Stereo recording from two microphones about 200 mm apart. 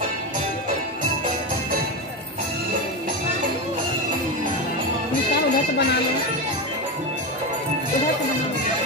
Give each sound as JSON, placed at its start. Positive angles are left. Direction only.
{"t": 5.3, "sound": "music", "side_deg": 55}